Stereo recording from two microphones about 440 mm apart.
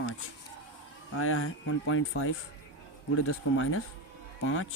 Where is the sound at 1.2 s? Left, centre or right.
Left.